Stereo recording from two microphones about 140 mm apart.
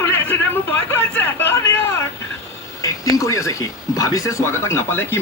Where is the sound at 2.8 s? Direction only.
25° left (ahead or behind).